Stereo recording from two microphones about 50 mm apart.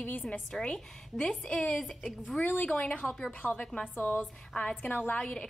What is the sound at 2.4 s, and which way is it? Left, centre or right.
Speech, left.